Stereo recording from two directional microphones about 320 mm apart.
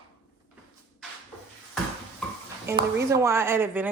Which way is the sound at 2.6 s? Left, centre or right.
Centre.